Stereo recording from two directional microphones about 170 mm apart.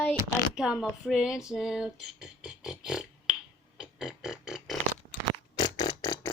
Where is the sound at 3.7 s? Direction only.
5° right (ahead or behind).